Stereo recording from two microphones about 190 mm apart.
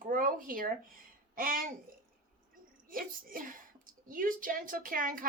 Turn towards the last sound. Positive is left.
turn(degrees=-45)  # may be behind; listen again after turning